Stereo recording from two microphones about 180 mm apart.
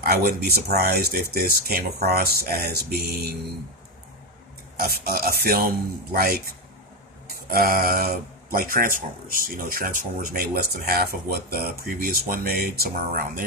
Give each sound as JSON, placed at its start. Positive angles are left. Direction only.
{"t": 0.0, "sound": "speech", "side_deg": -60}
{"t": 4.8, "sound": "speech", "side_deg": -55}
{"t": 7.5, "sound": "speech", "side_deg": -55}